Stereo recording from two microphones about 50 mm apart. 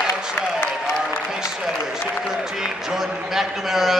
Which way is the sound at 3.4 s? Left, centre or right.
Centre.